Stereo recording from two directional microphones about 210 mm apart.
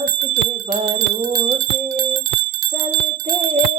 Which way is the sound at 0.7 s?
30° right (ahead or behind).